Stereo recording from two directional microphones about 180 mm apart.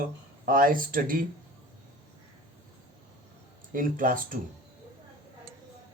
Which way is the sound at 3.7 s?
50° right (ahead or behind).